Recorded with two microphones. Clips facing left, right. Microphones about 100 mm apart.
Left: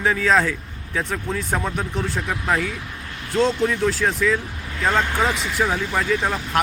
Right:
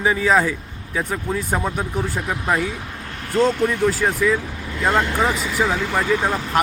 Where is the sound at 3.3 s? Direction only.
50° right (ahead or behind).